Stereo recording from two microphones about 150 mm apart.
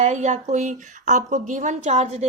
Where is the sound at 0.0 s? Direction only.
50° right (ahead or behind).